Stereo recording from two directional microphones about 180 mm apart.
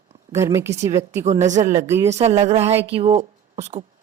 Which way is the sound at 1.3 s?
40° right (ahead or behind).